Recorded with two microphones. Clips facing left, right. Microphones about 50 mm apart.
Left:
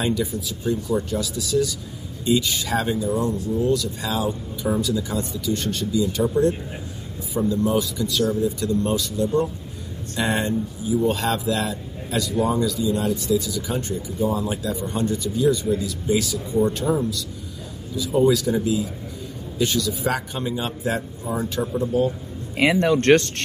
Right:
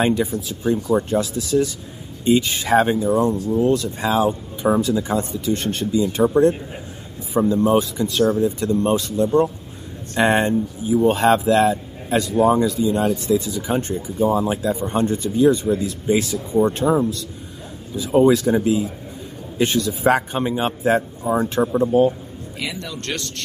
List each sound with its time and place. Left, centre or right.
0.0 s speech: right
22.6 s speech: left